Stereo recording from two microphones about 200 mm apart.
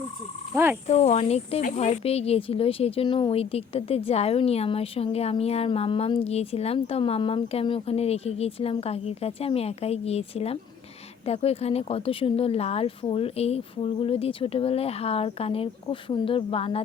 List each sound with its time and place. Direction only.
0.5 s speech: 10° right (ahead or behind)
0.9 s speech: 35° left (ahead or behind)